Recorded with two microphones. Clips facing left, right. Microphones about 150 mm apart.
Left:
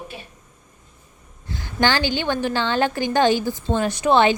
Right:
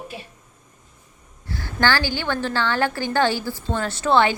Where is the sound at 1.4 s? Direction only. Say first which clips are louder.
Left 1 dB; 20° left (ahead or behind).